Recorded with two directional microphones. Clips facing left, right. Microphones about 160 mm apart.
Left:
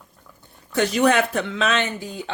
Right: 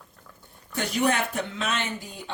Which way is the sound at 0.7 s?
90° left.